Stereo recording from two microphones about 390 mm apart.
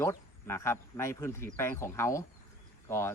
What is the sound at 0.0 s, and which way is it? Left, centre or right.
Speech, centre.